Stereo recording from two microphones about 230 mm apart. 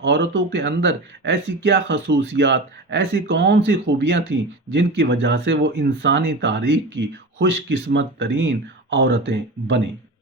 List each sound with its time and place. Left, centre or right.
0.0 s speech: right